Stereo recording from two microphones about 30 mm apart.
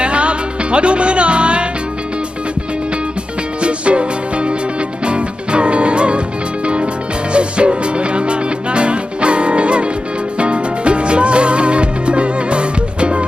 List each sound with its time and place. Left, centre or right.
0.0 s music: right
3.6 s music: right
7.3 s music: right